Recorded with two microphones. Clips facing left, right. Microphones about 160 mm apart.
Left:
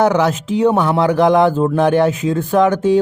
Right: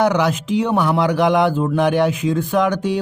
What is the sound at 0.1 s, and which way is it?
Speech, 40° left (ahead or behind).